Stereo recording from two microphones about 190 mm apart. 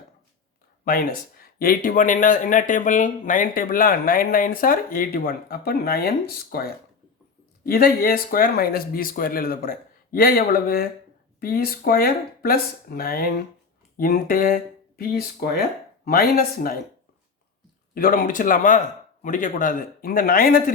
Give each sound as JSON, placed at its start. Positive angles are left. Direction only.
{"t": 0.9, "sound": "speech", "side_deg": 50}
{"t": 17.9, "sound": "speech", "side_deg": 50}